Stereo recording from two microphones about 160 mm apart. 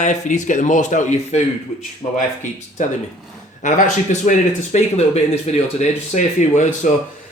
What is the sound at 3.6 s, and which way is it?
A man's voice, 50° left (ahead or behind).